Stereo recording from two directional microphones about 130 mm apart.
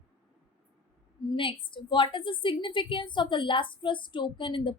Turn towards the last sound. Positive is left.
turn(degrees=40)  # may be behind; listen again after turning